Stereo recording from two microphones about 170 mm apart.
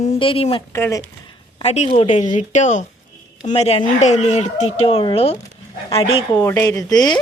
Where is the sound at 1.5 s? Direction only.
40° left (ahead or behind).